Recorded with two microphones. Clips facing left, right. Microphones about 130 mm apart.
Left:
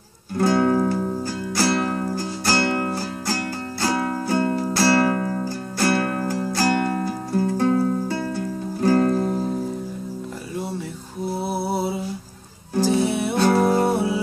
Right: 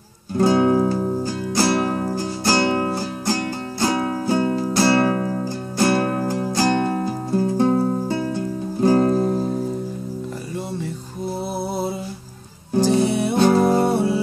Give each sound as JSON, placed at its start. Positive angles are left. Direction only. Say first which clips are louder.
{"t": 0.4, "sound": "music", "louder": "right 2 dB", "side_deg": -15}
{"t": 12.8, "sound": "music", "louder": "right 2 dB", "side_deg": 0}
{"t": 13.4, "sound": "music", "louder": "right 2 dB", "side_deg": -15}
{"t": 13.8, "sound": "music", "louder": "right 2 dB", "side_deg": 10}